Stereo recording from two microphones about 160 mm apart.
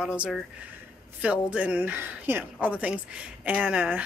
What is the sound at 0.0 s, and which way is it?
A woman's voice, 5° right (ahead or behind).